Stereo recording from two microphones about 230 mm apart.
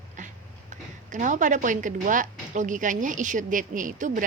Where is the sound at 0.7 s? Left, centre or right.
Right.